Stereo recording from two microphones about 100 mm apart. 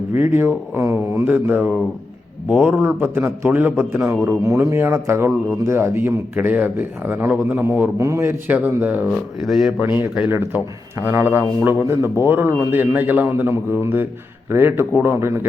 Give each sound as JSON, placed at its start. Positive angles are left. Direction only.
{"t": 0.1, "sound": "a man's voice", "side_deg": -25}
{"t": 4.1, "sound": "speech", "side_deg": -5}
{"t": 4.4, "sound": "a man's voice", "side_deg": -30}
{"t": 7.9, "sound": "a man's voice", "side_deg": -30}
{"t": 9.0, "sound": "speech", "side_deg": 0}
{"t": 10.2, "sound": "a man's voice", "side_deg": -25}